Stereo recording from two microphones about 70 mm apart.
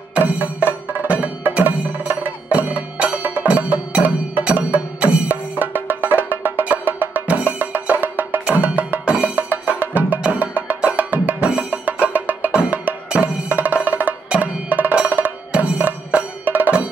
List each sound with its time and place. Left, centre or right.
0.1 s music: right
14.3 s percussion: right